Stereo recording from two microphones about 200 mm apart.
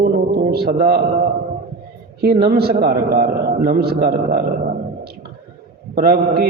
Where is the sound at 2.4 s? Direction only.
50° right (ahead or behind).